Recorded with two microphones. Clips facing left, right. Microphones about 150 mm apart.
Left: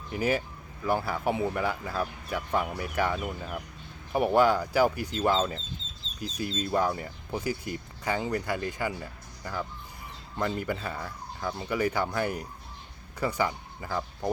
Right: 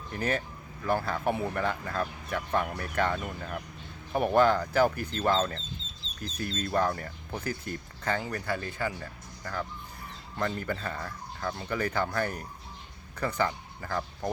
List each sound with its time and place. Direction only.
0.1 s speech: 10° left (ahead or behind)